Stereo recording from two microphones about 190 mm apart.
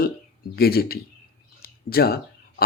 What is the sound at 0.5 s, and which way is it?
Speech, 55° left (ahead or behind).